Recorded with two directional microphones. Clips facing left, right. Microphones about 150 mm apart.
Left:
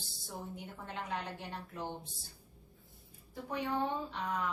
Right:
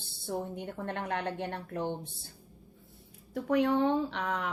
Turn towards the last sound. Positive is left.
turn(degrees=-85)